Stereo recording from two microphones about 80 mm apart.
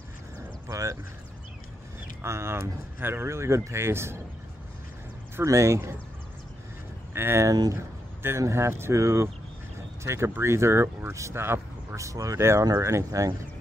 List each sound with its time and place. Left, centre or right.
0.7 s a sound: right
2.2 s speech: right
5.3 s speech: right
7.2 s speech: right